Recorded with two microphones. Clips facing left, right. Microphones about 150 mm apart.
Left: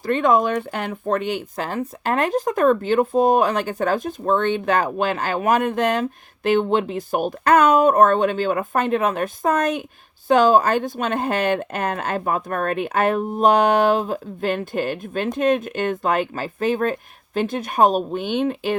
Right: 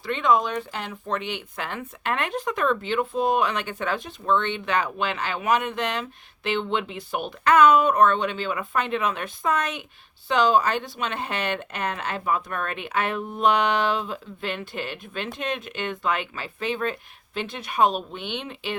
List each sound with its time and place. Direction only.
0.0 s speech: 45° left (ahead or behind)